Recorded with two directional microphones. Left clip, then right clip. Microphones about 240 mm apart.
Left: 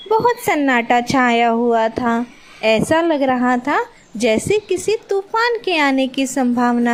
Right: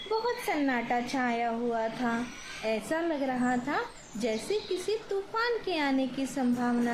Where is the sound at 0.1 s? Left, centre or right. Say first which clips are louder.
Left 15 dB; left.